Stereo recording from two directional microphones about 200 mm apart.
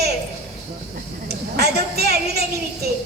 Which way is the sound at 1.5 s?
50° right (ahead or behind).